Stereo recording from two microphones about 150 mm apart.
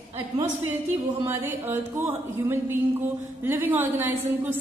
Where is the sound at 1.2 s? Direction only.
15° right (ahead or behind).